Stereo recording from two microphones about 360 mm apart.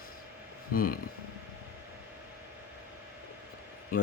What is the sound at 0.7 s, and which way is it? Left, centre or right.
Speech, left.